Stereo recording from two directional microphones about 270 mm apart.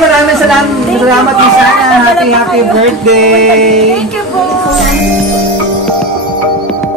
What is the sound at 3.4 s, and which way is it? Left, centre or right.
Speech, right.